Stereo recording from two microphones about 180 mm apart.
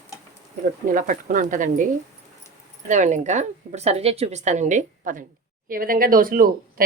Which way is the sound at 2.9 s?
45° right (ahead or behind).